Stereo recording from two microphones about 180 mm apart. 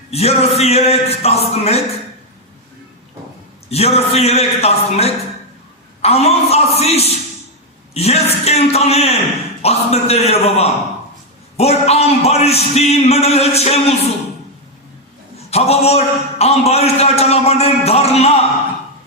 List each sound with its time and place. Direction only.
0.1 s a man's voice: 35° left (ahead or behind)
3.7 s a man's voice: 35° left (ahead or behind)
15.4 s a man's voice: 35° left (ahead or behind)